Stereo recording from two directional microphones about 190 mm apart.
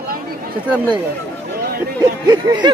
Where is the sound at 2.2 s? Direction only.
25° right (ahead or behind).